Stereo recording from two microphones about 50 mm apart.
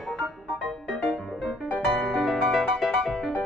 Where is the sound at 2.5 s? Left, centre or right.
Centre.